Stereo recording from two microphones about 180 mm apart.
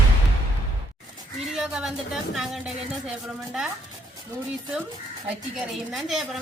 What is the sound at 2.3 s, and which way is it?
Speech, centre (ahead or behind).